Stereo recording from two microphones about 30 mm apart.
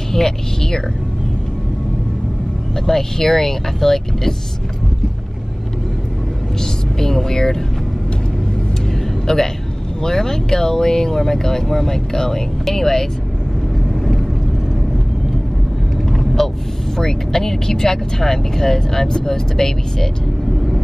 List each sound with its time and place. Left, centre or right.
0.1 s speech: centre
2.7 s speech: centre
6.6 s speech: centre
9.3 s speech: centre
13.9 s vehicle: centre
16.1 s vehicle: centre
16.9 s speech: centre